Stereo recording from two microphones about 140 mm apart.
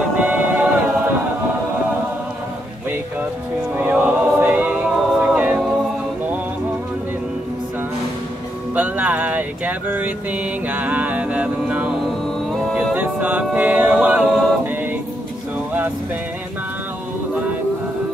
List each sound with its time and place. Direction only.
0.2 s choir: 10° right (ahead or behind)
3.7 s choir: 15° right (ahead or behind)
8.7 s mantra: 10° right (ahead or behind)
12.9 s a capella: 10° right (ahead or behind)